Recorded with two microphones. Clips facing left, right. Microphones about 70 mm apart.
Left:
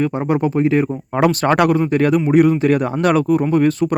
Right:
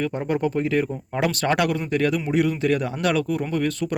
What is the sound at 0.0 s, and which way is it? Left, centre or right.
Speech, left.